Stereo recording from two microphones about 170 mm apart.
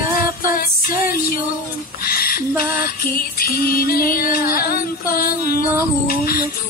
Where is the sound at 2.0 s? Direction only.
60° left (ahead or behind).